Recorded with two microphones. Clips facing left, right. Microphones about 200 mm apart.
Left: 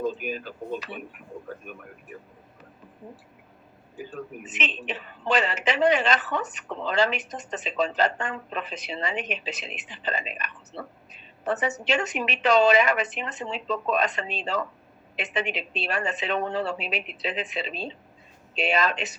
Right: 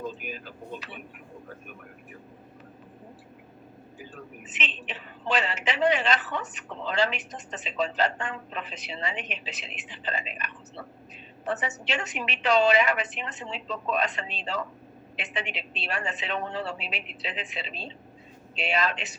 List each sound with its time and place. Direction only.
0.0 s speech: 45° left (ahead or behind)
4.4 s a woman's voice: 45° left (ahead or behind)